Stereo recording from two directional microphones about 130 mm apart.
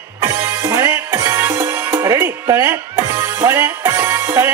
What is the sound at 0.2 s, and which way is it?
Music, 20° right (ahead or behind).